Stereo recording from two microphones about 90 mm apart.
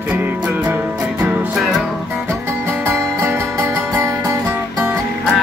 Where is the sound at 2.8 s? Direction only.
30° right (ahead or behind).